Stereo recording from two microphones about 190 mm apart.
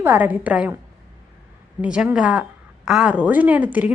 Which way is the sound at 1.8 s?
5° right (ahead or behind).